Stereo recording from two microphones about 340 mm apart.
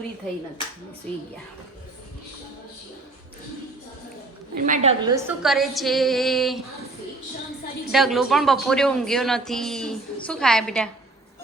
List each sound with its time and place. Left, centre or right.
4.5 s a woman's voice: right
5.4 s a man's voice: centre
7.9 s a man's voice: centre